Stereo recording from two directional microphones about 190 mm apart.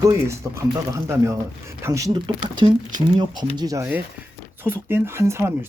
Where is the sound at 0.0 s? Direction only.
15° right (ahead or behind).